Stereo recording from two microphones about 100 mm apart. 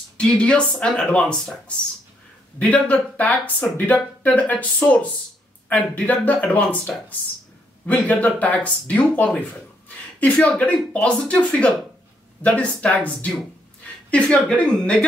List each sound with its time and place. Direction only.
0.2 s speech: 10° left (ahead or behind)
2.6 s speech: 15° left (ahead or behind)